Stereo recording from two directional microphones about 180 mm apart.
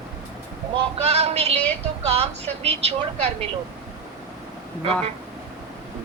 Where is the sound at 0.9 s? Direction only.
35° right (ahead or behind).